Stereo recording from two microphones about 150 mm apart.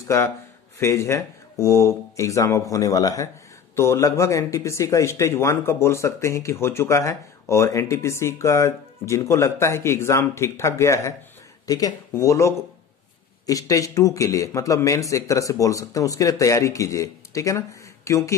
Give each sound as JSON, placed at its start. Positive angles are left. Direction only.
{"t": 0.7, "sound": "speech", "side_deg": 20}